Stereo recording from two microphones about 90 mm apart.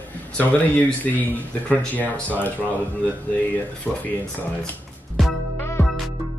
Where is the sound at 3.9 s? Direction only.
5° left (ahead or behind).